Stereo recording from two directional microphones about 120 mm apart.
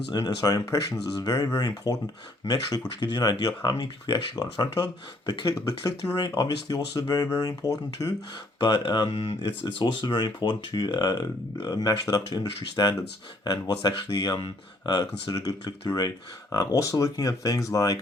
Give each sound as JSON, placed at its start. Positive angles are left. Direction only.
{"t": 0.1, "sound": "speech", "side_deg": 30}